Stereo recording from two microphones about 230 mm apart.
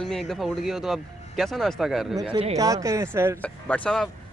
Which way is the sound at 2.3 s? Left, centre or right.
Right.